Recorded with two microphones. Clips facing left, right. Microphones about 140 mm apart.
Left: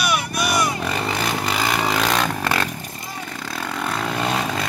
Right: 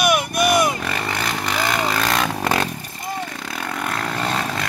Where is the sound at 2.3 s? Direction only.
15° right (ahead or behind).